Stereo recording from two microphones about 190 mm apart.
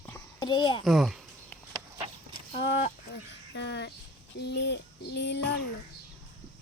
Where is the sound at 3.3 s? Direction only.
65° left (ahead or behind).